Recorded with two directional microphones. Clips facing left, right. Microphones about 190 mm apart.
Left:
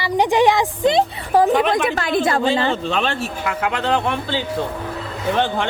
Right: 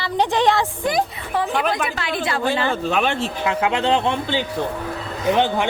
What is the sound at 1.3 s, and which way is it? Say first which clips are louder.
Speech: left 8 dB; 45° left (ahead or behind).